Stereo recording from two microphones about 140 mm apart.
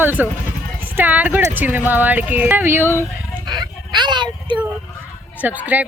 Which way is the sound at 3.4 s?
30° right (ahead or behind).